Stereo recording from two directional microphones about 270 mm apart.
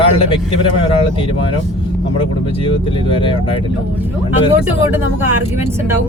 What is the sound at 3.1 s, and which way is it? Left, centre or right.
Speech, centre.